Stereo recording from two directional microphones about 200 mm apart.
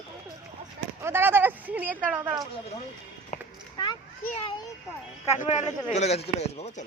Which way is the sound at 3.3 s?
40° left (ahead or behind).